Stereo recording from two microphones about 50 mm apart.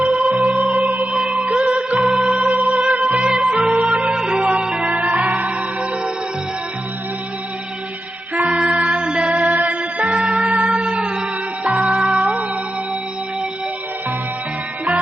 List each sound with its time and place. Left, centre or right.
0.0 s music: right
8.4 s music: right